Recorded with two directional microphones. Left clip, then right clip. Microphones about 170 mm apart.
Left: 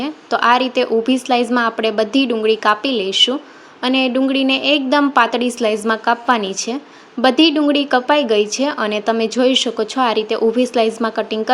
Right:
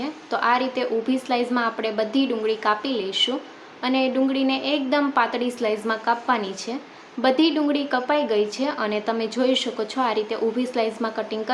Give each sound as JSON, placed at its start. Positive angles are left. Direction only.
{"t": 0.0, "sound": "a woman's voice", "side_deg": 45}